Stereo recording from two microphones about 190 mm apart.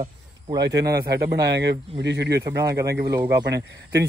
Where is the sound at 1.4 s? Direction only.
65° right (ahead or behind).